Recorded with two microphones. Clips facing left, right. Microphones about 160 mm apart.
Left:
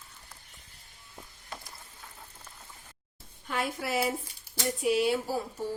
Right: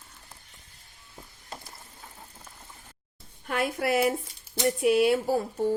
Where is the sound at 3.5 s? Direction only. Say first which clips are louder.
Right 5 dB; 60° right (ahead or behind).